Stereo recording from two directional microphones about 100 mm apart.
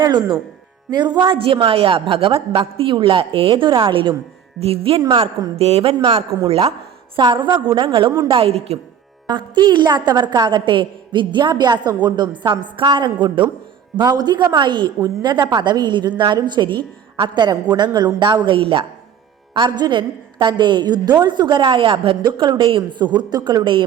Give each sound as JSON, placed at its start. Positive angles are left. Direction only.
{"t": 0.0, "sound": "a woman's voice", "side_deg": -45}
{"t": 4.6, "sound": "speech", "side_deg": -70}
{"t": 5.5, "sound": "a woman's voice", "side_deg": -80}
{"t": 6.5, "sound": "speech", "side_deg": -90}
{"t": 7.2, "sound": "a woman's voice", "side_deg": -50}
{"t": 8.3, "sound": "a woman's voice", "side_deg": -70}
{"t": 9.2, "sound": "a woman's voice", "side_deg": -45}
{"t": 19.5, "sound": "a woman's voice", "side_deg": -50}